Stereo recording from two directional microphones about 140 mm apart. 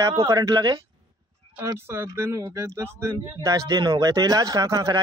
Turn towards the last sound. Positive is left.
turn(degrees=-25)  # may be behind; listen again after turning